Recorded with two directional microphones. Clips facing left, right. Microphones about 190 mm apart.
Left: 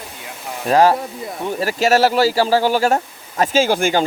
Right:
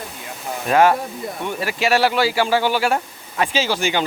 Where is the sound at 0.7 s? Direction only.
35° left (ahead or behind).